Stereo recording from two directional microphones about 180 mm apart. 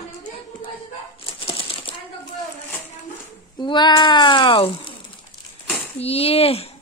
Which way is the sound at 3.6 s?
25° left (ahead or behind).